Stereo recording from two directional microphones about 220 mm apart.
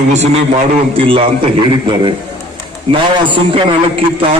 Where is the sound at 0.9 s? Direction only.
25° right (ahead or behind).